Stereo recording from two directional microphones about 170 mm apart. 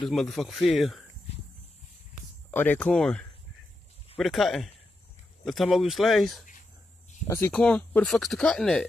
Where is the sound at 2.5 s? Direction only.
10° left (ahead or behind).